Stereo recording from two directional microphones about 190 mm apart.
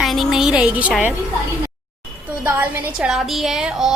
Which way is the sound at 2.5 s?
5° right (ahead or behind).